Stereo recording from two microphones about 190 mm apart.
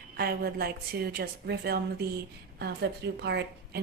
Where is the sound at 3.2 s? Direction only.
60° right (ahead or behind).